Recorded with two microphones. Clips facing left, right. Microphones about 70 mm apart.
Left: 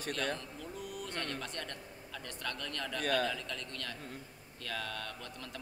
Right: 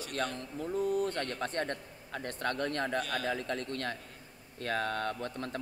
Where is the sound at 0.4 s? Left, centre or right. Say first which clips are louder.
Right 10 dB; right.